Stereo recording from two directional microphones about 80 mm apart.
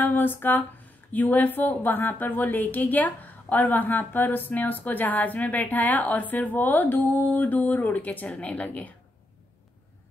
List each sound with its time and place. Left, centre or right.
0.0 s speech: left